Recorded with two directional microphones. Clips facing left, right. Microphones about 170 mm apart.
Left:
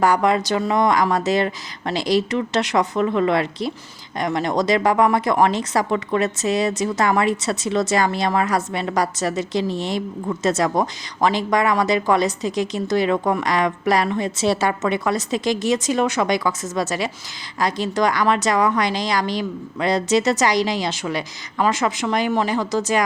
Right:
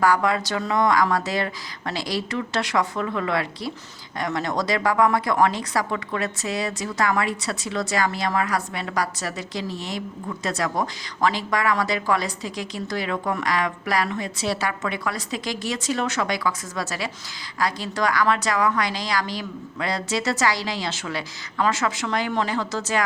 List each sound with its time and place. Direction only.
0.0 s speech: 20° left (ahead or behind)